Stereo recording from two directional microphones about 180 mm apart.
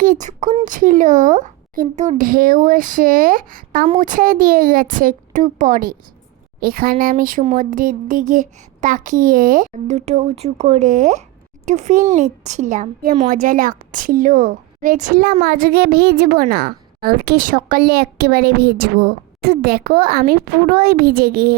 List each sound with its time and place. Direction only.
0.0 s a child's voice: 45° right (ahead or behind)